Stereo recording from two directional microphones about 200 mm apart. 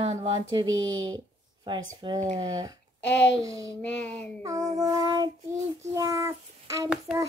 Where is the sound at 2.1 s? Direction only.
35° right (ahead or behind).